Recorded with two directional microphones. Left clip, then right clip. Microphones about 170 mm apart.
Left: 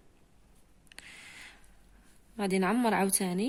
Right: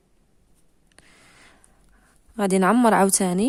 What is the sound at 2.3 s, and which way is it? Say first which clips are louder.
A woman's voice: right 10 dB; 65° right (ahead or behind).